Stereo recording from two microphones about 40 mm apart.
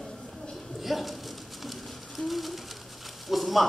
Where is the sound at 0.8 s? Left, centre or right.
Centre.